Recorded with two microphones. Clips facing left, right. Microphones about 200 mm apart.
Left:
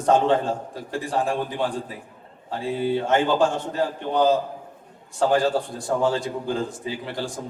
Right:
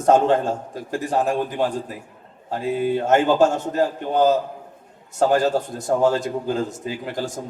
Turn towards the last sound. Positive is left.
turn(degrees=-45)  # may be behind; listen again after turning